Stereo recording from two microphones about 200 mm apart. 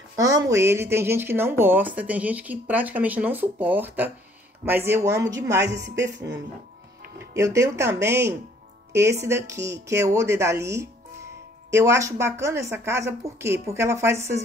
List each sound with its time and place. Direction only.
0.1 s a woman's voice: 15° right (ahead or behind)
6.1 s speech: 60° right (ahead or behind)
7.3 s a woman's voice: 15° right (ahead or behind)